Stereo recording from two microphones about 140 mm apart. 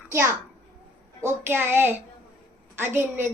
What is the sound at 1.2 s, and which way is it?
A child's voice, 15° right (ahead or behind).